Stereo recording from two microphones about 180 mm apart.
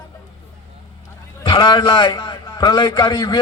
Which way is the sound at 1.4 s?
25° left (ahead or behind).